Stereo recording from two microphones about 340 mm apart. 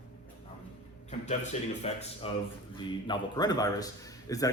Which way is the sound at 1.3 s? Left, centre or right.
Centre.